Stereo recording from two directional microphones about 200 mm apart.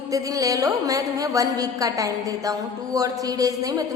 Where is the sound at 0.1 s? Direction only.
15° right (ahead or behind).